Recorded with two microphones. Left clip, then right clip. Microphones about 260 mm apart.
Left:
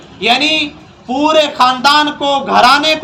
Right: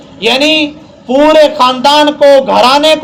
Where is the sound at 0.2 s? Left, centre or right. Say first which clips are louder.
Right 3 dB; left.